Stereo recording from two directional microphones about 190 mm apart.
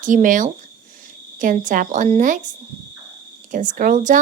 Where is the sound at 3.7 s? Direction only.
40° right (ahead or behind).